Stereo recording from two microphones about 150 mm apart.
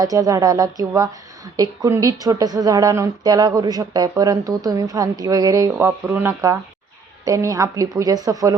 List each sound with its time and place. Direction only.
0.0 s a woman's voice: 25° right (ahead or behind)